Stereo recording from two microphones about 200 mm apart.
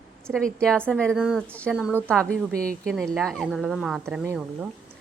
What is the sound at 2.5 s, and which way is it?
Speech, 45° right (ahead or behind).